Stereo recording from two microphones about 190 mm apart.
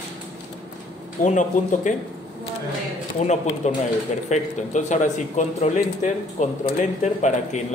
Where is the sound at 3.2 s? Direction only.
35° left (ahead or behind).